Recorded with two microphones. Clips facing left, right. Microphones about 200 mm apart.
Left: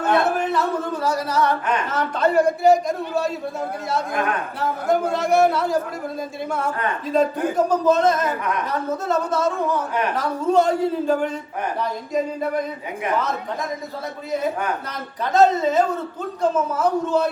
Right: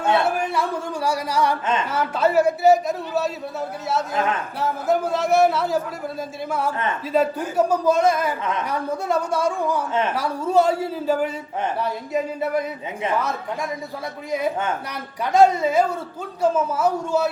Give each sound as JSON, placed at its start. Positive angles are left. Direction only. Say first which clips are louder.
{"t": 1.0, "sound": "a man's voice", "louder": "even", "side_deg": -10}
{"t": 4.1, "sound": "a man's voice", "louder": "even", "side_deg": -25}
{"t": 4.6, "sound": "a man's voice", "louder": "left 1 dB", "side_deg": 0}
{"t": 7.1, "sound": "a man's voice", "louder": "left 1 dB", "side_deg": -5}
{"t": 15.2, "sound": "a man's voice", "louder": "right 1 dB", "side_deg": -10}